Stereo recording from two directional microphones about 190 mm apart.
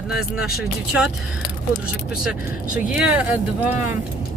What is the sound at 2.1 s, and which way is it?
Speech, 5° right (ahead or behind).